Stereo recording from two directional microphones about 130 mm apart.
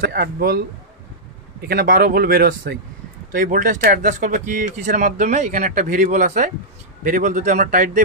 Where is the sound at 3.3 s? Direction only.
90° right.